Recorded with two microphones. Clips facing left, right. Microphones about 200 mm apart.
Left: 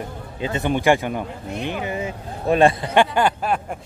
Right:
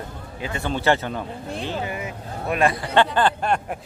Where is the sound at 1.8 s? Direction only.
30° left (ahead or behind).